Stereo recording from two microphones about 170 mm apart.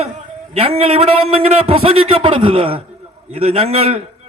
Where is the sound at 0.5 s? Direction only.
35° right (ahead or behind).